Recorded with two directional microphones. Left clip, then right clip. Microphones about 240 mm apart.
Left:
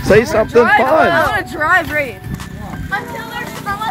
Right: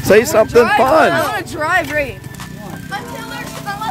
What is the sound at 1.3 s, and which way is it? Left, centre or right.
Speech, right.